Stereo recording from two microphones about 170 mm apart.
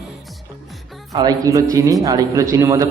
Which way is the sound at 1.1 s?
20° right (ahead or behind).